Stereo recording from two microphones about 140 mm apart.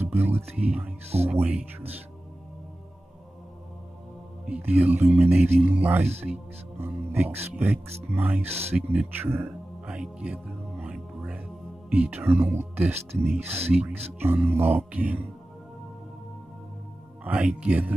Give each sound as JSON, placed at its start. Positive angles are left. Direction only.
{"t": 0.0, "sound": "speech", "side_deg": -15}
{"t": 4.5, "sound": "speech", "side_deg": -10}
{"t": 8.7, "sound": "music", "side_deg": -10}
{"t": 11.9, "sound": "speech", "side_deg": -10}
{"t": 17.2, "sound": "speech", "side_deg": -10}